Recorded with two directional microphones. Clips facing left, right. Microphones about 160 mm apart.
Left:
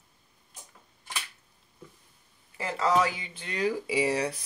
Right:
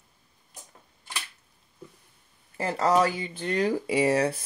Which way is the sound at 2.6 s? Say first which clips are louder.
Right 3 dB; 45° right (ahead or behind).